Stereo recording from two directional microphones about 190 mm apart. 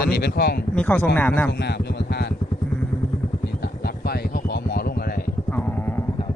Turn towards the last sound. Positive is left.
turn(degrees=55)  # may be behind; listen again after turning